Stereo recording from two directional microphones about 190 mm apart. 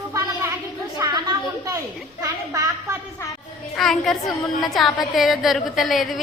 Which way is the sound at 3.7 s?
Centre (ahead or behind).